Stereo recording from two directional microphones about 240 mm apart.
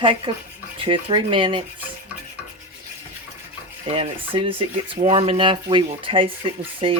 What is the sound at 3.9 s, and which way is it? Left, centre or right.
Speech, right.